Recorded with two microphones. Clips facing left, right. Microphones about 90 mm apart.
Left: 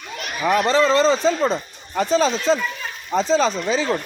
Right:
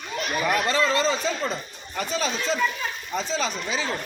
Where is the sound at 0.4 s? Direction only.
30° left (ahead or behind).